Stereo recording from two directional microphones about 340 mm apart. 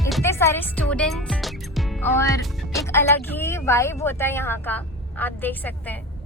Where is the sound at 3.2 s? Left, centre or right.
Centre.